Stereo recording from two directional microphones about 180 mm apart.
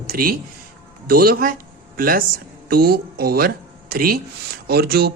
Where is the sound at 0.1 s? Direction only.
55° right (ahead or behind).